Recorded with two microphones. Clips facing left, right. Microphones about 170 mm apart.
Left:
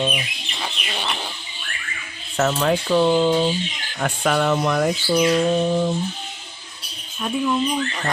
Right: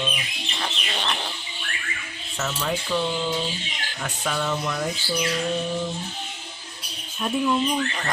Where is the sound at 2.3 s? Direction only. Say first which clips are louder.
Left 8 dB; 65° left (ahead or behind).